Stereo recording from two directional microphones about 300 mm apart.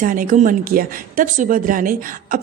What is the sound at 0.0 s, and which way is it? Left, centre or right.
Speech, right.